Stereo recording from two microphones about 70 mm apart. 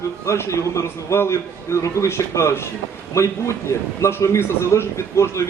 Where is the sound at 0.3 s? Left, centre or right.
Left.